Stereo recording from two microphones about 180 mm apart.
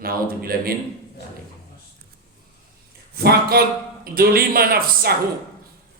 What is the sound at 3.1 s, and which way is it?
Speech, 60° right (ahead or behind).